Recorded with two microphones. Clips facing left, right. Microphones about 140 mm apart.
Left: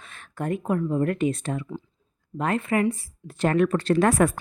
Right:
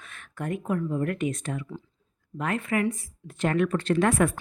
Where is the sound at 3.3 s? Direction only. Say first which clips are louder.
Left 3 dB; 40° left (ahead or behind).